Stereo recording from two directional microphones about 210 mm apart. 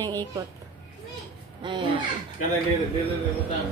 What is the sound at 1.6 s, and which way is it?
Speech, 20° right (ahead or behind).